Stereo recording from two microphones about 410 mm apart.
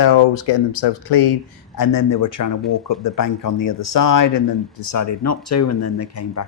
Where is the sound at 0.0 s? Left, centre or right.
Left.